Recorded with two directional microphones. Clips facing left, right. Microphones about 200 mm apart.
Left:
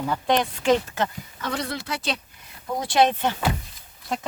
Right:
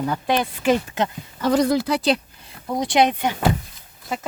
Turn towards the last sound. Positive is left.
turn(degrees=-5)  # may be behind; listen again after turning